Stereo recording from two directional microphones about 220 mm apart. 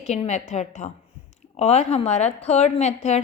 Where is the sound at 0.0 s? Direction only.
30° left (ahead or behind).